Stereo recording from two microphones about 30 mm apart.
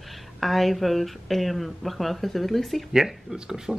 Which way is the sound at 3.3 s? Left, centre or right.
Right.